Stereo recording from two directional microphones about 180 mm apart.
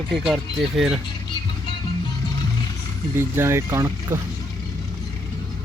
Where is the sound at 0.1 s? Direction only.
Centre (ahead or behind).